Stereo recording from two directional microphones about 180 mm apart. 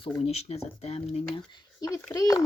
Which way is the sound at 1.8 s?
20° left (ahead or behind).